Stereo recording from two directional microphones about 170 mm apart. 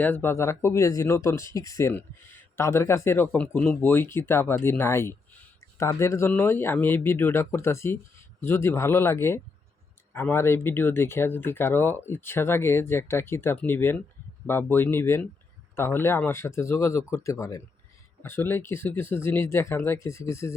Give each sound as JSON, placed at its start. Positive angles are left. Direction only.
{"t": 0.0, "sound": "speech", "side_deg": 10}